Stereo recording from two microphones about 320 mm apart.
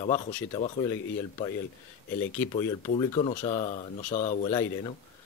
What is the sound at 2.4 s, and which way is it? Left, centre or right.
Speech, centre.